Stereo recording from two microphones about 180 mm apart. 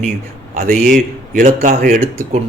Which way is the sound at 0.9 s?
45° right (ahead or behind).